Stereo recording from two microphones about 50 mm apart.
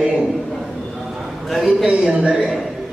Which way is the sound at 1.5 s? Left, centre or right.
Centre.